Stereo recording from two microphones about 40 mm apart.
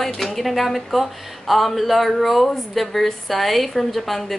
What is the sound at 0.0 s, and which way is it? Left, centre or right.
A woman's voice, centre.